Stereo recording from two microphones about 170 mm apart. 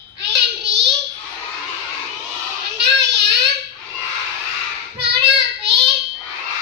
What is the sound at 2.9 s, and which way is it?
Child singing, 90° right.